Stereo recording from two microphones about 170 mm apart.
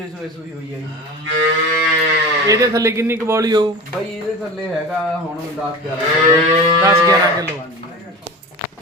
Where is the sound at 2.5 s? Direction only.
20° right (ahead or behind).